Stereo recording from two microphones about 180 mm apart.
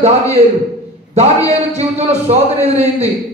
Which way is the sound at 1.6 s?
35° right (ahead or behind).